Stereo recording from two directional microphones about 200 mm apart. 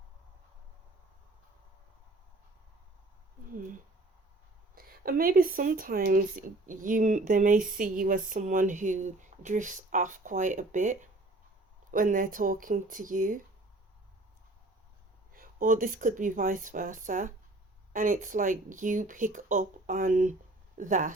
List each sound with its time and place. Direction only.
4.7 s speech: 45° right (ahead or behind)
15.3 s speech: 45° right (ahead or behind)